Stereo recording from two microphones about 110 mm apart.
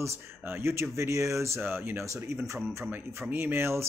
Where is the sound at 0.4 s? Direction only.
20° right (ahead or behind).